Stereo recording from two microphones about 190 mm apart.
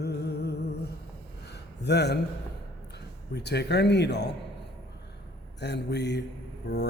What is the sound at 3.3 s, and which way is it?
Speech, 60° left (ahead or behind).